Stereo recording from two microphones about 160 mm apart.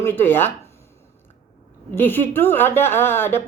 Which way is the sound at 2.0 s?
15° left (ahead or behind).